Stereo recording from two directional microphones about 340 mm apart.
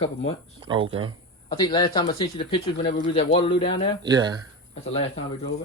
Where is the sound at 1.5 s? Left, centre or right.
Centre.